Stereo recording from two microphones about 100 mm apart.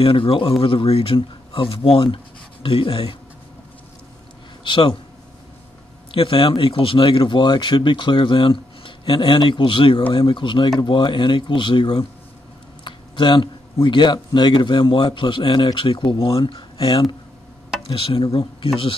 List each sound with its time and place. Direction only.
0.0 s speech: 65° left (ahead or behind)
4.6 s speech: 55° left (ahead or behind)
6.1 s speech: 65° left (ahead or behind)